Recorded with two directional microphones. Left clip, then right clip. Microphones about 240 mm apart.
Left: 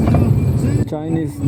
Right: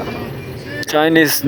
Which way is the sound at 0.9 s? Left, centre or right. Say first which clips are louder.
Right 10 dB; right.